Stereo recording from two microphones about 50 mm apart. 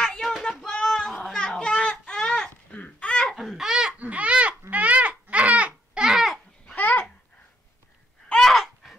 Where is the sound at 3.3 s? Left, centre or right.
Centre.